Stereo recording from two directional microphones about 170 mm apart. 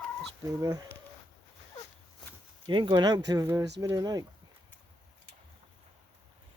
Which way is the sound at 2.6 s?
25° right (ahead or behind).